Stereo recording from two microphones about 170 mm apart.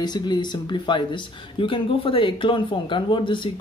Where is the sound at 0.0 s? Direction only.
25° left (ahead or behind).